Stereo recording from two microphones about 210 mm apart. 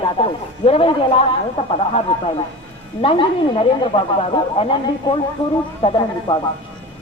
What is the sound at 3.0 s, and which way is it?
Speech, 25° left (ahead or behind).